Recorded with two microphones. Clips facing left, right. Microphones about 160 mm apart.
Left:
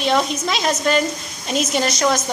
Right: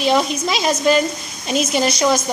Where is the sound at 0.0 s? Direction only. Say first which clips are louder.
Right 2 dB; 5° right (ahead or behind).